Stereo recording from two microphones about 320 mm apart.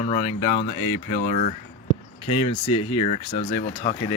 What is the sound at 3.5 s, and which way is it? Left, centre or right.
Speech, left.